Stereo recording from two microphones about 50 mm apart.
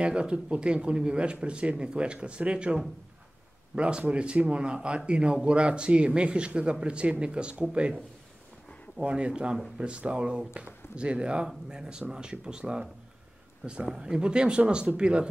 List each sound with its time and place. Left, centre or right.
0.0 s speech: right
9.0 s speech: right
13.9 s speech: centre